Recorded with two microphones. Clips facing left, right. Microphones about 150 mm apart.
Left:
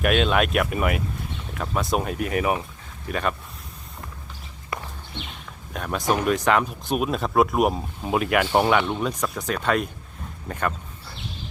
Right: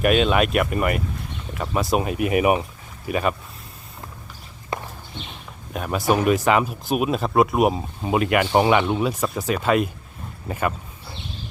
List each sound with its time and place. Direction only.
0.0 s speech: centre (ahead or behind)
4.7 s walk: 25° right (ahead or behind)
5.7 s speech: 5° right (ahead or behind)